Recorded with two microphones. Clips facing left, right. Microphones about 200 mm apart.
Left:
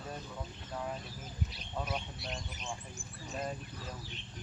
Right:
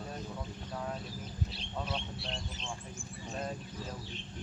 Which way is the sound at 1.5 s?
30° right (ahead or behind).